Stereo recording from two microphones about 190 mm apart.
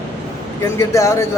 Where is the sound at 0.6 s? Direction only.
15° left (ahead or behind).